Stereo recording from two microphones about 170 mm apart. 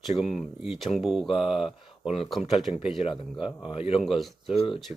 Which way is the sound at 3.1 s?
30° left (ahead or behind).